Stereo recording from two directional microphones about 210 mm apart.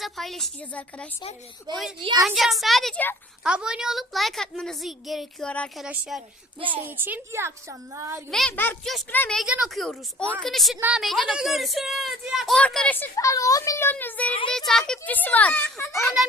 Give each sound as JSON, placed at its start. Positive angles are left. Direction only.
{"t": 0.0, "sound": "a woman's voice", "side_deg": 0}
{"t": 2.0, "sound": "a woman's voice", "side_deg": -20}
{"t": 2.2, "sound": "a woman's voice", "side_deg": 0}
{"t": 3.4, "sound": "a woman's voice", "side_deg": -5}
{"t": 8.3, "sound": "a woman's voice", "side_deg": 5}